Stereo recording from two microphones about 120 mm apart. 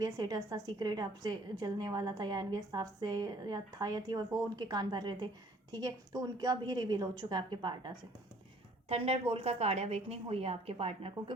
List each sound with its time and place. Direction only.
0.0 s a woman's voice: 35° right (ahead or behind)
8.9 s a woman's voice: 55° right (ahead or behind)